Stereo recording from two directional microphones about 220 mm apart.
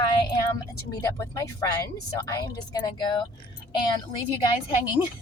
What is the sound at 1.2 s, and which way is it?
A woman's voice, 15° left (ahead or behind).